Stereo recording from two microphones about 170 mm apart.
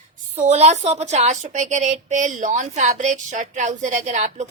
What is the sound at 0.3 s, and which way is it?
A woman's voice, 40° right (ahead or behind).